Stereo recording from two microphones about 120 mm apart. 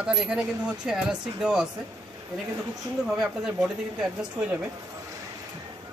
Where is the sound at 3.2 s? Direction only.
5° right (ahead or behind).